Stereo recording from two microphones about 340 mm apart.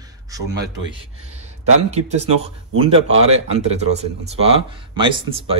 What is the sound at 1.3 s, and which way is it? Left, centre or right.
Speech, centre.